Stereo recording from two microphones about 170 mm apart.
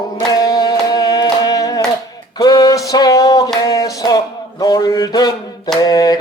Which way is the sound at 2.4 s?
25° left (ahead or behind).